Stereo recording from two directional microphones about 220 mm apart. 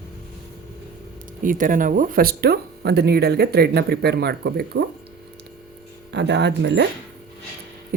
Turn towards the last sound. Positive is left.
turn(degrees=-50)  # may be behind; listen again after turning